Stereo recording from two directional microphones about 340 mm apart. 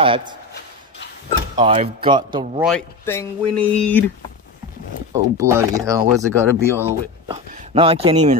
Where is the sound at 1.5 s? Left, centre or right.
Centre.